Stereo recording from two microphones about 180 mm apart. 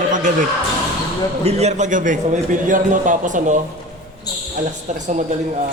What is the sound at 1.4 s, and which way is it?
A man's voice, 35° right (ahead or behind).